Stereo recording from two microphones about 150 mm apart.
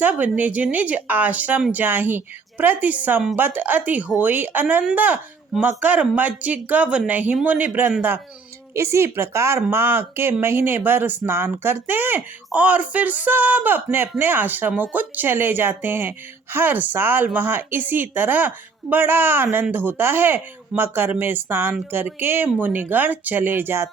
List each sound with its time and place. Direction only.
0.0 s speech: 10° right (ahead or behind)